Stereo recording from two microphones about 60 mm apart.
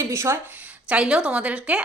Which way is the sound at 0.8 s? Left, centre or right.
Centre.